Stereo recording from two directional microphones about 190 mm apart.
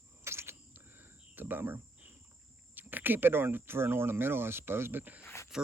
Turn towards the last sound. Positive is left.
turn(degrees=15)  # may be behind; listen again after turning